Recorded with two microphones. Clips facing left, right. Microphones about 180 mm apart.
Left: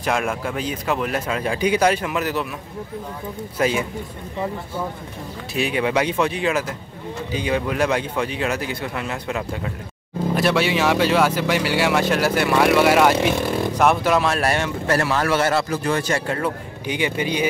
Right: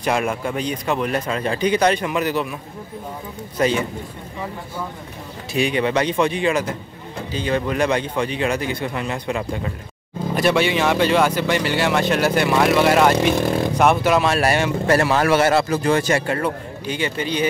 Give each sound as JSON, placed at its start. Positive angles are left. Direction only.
{"t": 0.0, "sound": "speech", "side_deg": 0}
{"t": 3.5, "sound": "speech", "side_deg": 5}
{"t": 5.5, "sound": "speech", "side_deg": 5}
{"t": 15.0, "sound": "speech", "side_deg": -15}
{"t": 16.3, "sound": "speech", "side_deg": 0}
{"t": 16.8, "sound": "speech", "side_deg": 15}